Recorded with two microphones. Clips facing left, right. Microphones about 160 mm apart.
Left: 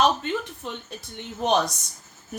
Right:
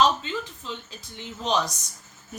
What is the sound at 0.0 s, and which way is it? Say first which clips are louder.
A woman's voice: even; 60° left (ahead or behind).